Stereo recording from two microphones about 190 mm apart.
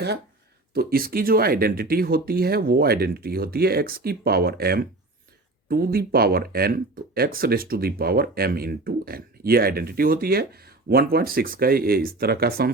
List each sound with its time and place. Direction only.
0.7 s speech: 50° right (ahead or behind)